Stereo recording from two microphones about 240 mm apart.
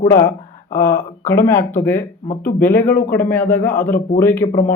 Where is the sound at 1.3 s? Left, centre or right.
Centre.